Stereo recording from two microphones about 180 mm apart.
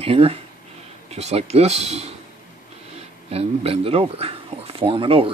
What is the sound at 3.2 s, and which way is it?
Speech, 35° right (ahead or behind).